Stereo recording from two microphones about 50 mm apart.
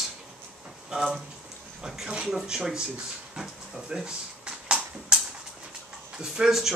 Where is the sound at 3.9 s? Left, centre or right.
Centre.